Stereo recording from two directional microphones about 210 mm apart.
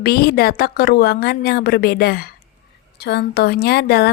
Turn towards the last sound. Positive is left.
turn(degrees=50)  # may be behind; listen again after turning